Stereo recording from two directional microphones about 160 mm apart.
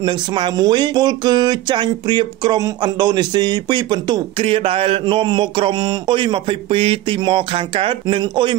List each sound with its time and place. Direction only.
0.0 s speech: 30° right (ahead or behind)